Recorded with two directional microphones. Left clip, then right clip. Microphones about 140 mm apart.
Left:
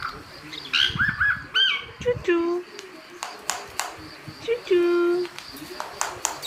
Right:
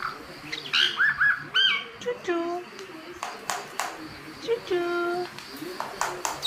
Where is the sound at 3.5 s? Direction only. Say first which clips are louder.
Left 1 dB; 20° left (ahead or behind).